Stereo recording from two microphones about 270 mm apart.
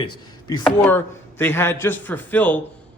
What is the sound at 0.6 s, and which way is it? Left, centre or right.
A man's voice, centre.